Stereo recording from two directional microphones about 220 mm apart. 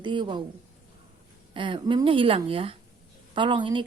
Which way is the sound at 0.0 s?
20° right (ahead or behind).